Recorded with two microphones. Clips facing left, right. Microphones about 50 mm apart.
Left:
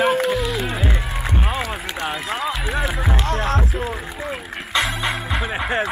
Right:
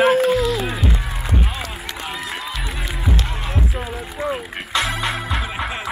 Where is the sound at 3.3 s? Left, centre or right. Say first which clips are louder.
Left 5 dB; left.